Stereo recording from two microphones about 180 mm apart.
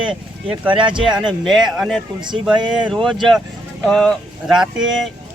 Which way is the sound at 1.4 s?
Centre (ahead or behind).